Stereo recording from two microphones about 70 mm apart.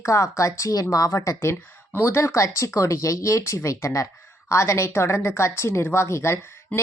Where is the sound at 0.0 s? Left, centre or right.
Left.